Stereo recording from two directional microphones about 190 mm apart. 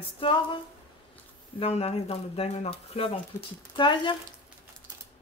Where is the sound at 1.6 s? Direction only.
30° left (ahead or behind).